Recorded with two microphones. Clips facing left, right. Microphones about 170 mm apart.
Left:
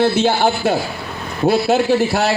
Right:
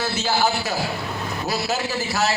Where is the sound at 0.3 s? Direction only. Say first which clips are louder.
Left 6 dB; 60° left (ahead or behind).